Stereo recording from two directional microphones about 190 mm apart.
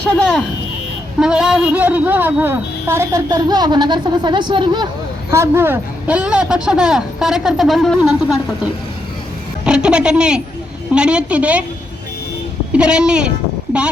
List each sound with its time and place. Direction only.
0.0 s a woman's voice: 5° left (ahead or behind); by 4.9 s 25° right (ahead or behind)
5.3 s speech: 15° right (ahead or behind)
9.6 s a woman's voice: 5° right (ahead or behind)
12.7 s speech: 5° right (ahead or behind)